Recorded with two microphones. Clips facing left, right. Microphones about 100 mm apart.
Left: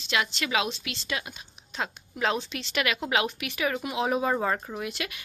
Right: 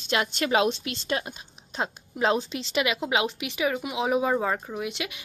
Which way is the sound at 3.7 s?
10° right (ahead or behind).